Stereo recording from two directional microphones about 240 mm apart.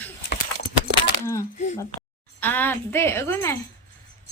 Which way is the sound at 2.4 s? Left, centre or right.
Centre.